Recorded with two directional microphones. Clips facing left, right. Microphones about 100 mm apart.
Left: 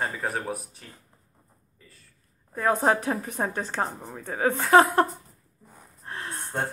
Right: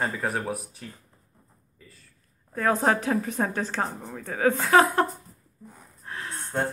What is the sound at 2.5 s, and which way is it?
A woman's voice, 15° left (ahead or behind).